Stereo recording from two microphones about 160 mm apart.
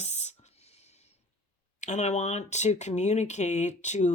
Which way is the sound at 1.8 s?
45° left (ahead or behind).